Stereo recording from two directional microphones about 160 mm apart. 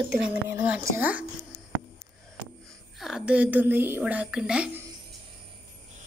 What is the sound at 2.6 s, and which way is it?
Speech, centre (ahead or behind).